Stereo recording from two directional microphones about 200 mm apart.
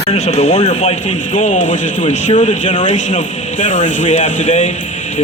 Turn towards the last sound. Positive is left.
turn(degrees=35)  # may be behind; listen again after turning